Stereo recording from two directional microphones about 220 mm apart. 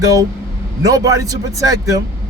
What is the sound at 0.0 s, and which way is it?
A man's voice, 15° right (ahead or behind).